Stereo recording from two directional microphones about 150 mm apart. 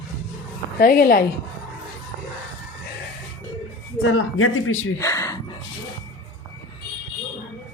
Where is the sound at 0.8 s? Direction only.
80° left.